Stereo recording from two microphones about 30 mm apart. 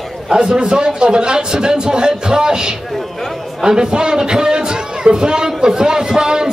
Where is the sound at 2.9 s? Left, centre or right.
Centre.